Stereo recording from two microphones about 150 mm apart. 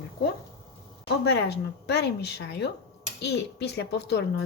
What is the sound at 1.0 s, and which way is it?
Speech, 90° left.